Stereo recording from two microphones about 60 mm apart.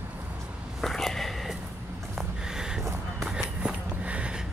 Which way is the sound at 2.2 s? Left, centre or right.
Centre.